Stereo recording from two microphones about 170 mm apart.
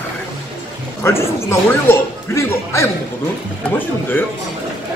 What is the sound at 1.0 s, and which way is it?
A man's voice, 15° left (ahead or behind).